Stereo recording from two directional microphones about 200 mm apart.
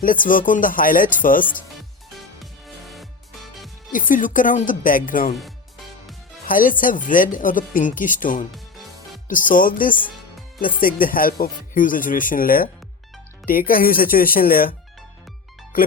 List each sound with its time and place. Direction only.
0.0 s speech: 45° left (ahead or behind)
1.5 s music: centre (ahead or behind)
3.9 s speech: 40° left (ahead or behind)
5.3 s music: centre (ahead or behind)
6.5 s speech: 45° left (ahead or behind)
8.5 s music: centre (ahead or behind)
9.5 s speech: 45° left (ahead or behind)